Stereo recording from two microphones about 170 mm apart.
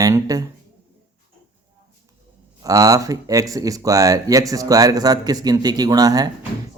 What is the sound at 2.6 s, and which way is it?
Speech, 20° right (ahead or behind).